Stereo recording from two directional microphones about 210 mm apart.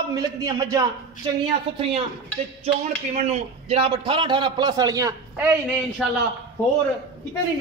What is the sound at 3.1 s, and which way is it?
A man's voice, 30° right (ahead or behind).